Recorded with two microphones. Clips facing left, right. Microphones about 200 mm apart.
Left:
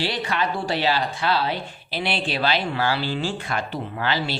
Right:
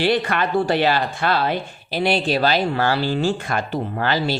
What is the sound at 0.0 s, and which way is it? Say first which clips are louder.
Speech: right 6 dB; 55° right (ahead or behind).